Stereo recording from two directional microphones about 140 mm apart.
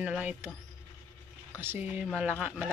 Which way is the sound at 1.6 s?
15° right (ahead or behind).